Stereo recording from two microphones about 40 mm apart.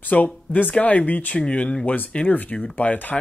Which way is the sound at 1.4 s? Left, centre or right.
Left.